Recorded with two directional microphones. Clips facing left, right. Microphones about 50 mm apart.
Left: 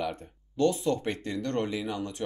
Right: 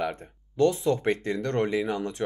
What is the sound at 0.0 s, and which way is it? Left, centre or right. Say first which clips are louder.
Speech: right 3 dB; right.